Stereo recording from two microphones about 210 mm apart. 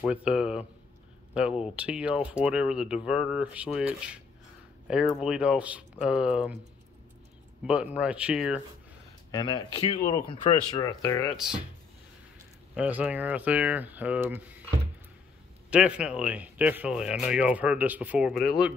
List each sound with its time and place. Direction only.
0.1 s speech: 5° right (ahead or behind)
7.6 s speech: 5° right (ahead or behind)
9.3 s speech: 20° left (ahead or behind)
11.3 s speech: 5° right (ahead or behind)
12.7 s speech: 5° right (ahead or behind)
15.7 s speech: 5° right (ahead or behind)